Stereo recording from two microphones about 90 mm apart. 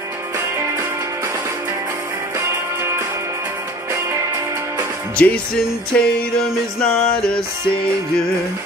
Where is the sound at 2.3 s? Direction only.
30° right (ahead or behind).